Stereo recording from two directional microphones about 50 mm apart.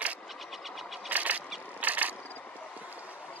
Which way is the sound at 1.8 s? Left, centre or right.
Right.